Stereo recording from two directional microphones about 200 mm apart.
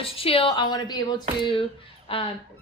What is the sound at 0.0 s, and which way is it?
A woman's voice, 30° left (ahead or behind).